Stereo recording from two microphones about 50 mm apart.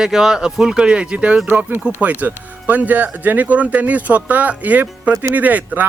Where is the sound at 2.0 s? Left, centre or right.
Right.